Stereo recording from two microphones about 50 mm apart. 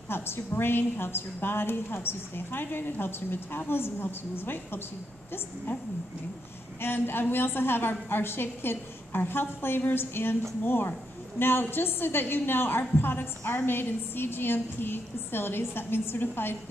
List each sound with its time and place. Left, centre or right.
0.1 s a woman's voice: left
6.8 s a woman's voice: left